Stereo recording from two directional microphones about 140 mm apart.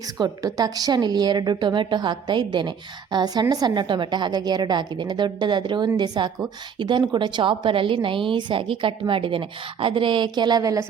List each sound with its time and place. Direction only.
0.2 s a woman's voice: 25° right (ahead or behind)